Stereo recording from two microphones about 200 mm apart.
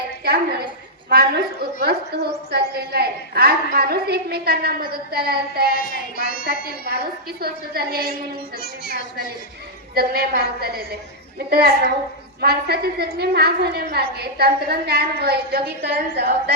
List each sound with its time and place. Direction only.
1.1 s a woman's voice: 50° right (ahead or behind)
2.5 s a woman's voice: 55° right (ahead or behind)
5.7 s child singing: 45° left (ahead or behind)
6.4 s a woman's voice: 50° right (ahead or behind)
9.9 s a woman's voice: 50° right (ahead or behind)